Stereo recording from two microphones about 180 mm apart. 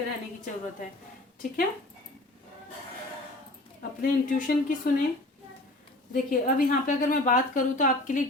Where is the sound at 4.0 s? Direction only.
45° left (ahead or behind).